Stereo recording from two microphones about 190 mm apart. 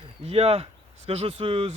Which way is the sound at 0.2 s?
30° right (ahead or behind).